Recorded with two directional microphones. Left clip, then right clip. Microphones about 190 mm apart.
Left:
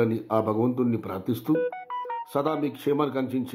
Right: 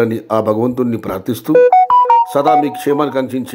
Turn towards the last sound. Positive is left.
turn(degrees=-15)  # may be behind; listen again after turning